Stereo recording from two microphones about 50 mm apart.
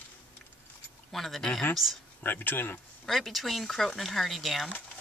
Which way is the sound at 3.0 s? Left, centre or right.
Centre.